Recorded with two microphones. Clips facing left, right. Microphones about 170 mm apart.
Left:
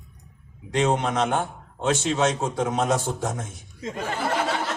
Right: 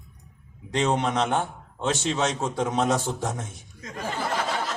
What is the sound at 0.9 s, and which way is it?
Speech, 45° left (ahead or behind).